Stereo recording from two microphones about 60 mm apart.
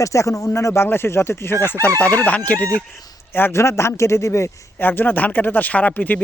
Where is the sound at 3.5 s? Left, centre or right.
Left.